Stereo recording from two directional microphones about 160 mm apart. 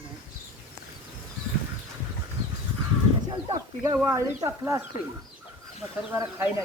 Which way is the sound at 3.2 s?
25° right (ahead or behind).